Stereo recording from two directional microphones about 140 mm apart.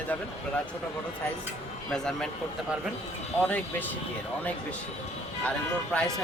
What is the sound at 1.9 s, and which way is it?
Speech, 5° left (ahead or behind).